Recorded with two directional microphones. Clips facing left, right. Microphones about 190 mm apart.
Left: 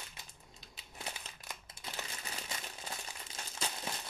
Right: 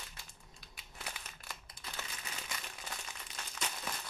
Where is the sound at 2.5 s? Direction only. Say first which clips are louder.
Left 1 dB; 25° left (ahead or behind).